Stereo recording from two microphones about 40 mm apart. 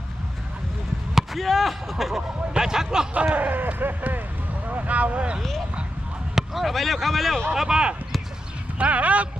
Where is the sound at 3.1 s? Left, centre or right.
Right.